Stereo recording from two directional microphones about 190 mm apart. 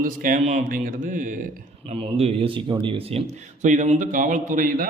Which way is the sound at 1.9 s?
30° right (ahead or behind).